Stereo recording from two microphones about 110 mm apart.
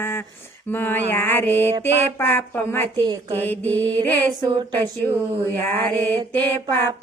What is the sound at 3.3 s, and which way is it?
Female singing, 15° left (ahead or behind).